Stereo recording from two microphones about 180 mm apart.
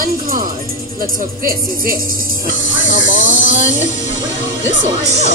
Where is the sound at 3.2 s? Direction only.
45° left (ahead or behind).